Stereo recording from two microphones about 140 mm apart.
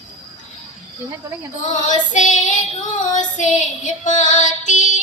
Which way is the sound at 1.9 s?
60° left (ahead or behind).